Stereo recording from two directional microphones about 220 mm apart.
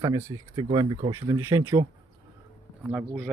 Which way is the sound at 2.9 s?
5° right (ahead or behind).